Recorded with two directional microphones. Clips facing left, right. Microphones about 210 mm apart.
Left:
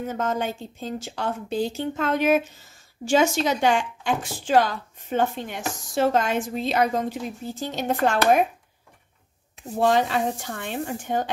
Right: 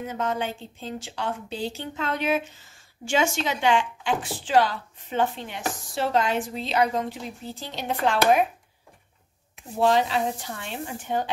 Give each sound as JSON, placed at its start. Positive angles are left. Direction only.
{"t": 0.0, "sound": "speech", "side_deg": 45}
{"t": 9.8, "sound": "speech", "side_deg": 50}